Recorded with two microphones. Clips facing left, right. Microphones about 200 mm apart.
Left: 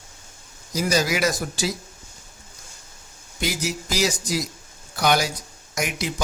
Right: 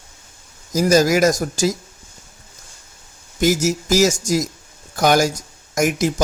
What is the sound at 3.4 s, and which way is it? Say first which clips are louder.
A man's voice: right 10 dB; 45° right (ahead or behind).